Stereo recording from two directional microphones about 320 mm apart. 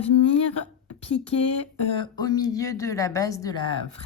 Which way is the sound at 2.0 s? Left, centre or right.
Centre.